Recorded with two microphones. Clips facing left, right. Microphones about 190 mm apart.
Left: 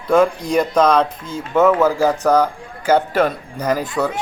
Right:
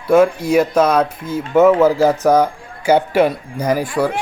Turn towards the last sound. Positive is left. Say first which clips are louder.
# right 2 dB
turn(degrees=-10)  # may be behind; listen again after turning